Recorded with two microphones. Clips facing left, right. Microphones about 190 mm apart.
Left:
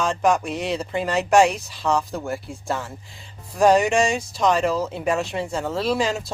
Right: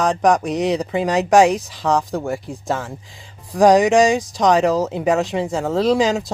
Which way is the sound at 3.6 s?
80° right.